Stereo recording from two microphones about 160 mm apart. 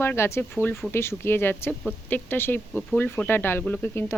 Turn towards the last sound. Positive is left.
turn(degrees=10)  # may be behind; listen again after turning